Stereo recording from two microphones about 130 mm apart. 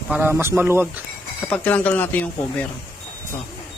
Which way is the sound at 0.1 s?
15° right (ahead or behind).